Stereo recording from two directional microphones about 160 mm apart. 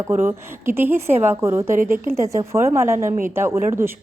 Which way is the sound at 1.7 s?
55° right (ahead or behind).